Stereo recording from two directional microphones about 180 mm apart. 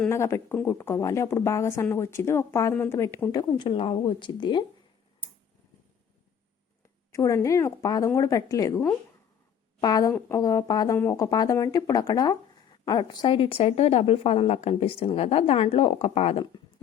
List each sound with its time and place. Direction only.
0.1 s a woman's voice: 15° left (ahead or behind)
3.6 s speech: 30° left (ahead or behind)
7.1 s a woman's voice: 15° left (ahead or behind); by 16.5 s 35° left (ahead or behind)